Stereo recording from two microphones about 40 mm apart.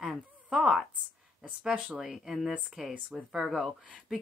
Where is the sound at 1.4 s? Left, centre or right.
Centre.